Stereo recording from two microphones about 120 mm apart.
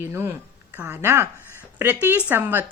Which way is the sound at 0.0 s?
20° right (ahead or behind).